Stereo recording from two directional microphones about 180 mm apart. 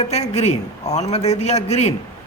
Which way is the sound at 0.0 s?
35° left (ahead or behind).